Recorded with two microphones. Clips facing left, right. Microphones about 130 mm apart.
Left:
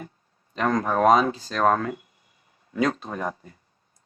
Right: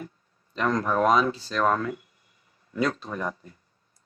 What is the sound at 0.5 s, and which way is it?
Speech, 45° left (ahead or behind).